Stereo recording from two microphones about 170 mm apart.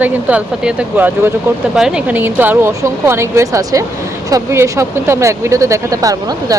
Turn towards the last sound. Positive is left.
turn(degrees=-20)  # may be behind; listen again after turning